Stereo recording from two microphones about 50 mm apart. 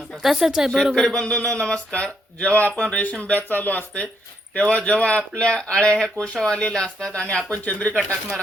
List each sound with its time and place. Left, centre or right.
0.2 s speech: centre
0.9 s speech: centre
3.0 s speech: left; by 7.1 s centre
7.1 s speech: left